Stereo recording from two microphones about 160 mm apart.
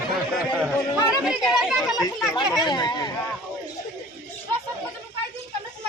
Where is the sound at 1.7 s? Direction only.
25° left (ahead or behind).